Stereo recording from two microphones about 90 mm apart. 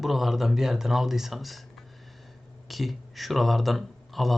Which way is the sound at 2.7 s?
Centre (ahead or behind).